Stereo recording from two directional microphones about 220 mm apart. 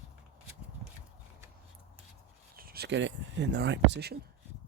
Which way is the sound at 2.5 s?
45° right (ahead or behind).